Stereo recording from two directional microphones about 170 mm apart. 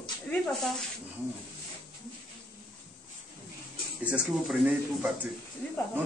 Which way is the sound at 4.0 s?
Centre (ahead or behind).